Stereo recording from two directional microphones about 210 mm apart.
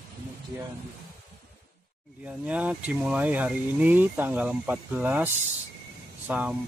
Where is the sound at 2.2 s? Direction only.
5° right (ahead or behind).